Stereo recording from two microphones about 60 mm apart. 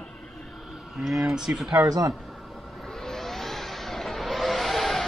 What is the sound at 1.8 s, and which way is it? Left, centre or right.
Speech, right.